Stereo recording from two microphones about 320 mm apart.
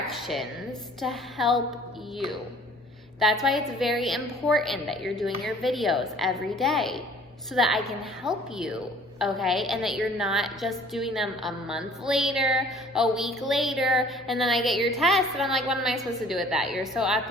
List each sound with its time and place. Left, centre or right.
0.1 s a sound: centre
1.0 s a woman's voice: centre
3.2 s a woman's voice: centre